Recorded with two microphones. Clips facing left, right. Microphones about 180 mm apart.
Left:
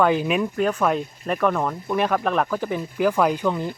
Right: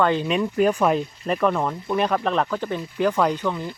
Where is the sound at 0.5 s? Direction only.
10° right (ahead or behind); by 3.7 s 15° left (ahead or behind).